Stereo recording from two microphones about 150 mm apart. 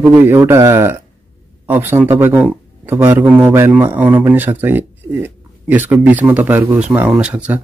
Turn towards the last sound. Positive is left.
turn(degrees=-10)  # may be behind; listen again after turning